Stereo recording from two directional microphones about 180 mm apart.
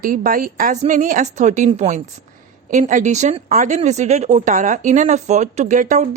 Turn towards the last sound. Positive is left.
turn(degrees=-40)  # may be behind; listen again after turning